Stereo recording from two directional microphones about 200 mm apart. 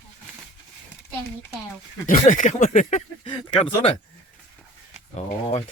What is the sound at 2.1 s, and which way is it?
Speech, 40° left (ahead or behind).